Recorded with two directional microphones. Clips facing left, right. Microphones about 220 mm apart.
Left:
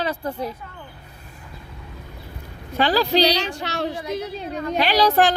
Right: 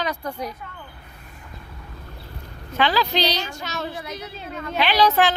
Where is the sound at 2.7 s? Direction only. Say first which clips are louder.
Left 3 dB; 40° left (ahead or behind).